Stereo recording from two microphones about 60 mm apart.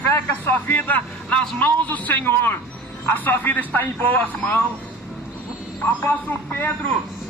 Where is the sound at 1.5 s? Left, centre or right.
Left.